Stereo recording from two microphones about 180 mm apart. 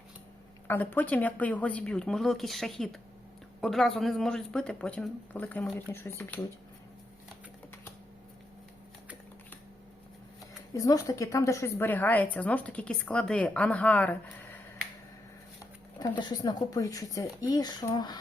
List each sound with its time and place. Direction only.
0.7 s a woman's voice: 10° left (ahead or behind)
10.8 s a woman's voice: 20° left (ahead or behind)
16.0 s speech: 25° left (ahead or behind)